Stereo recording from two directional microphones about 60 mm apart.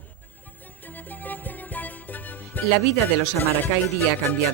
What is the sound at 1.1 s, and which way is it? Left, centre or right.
Music, left.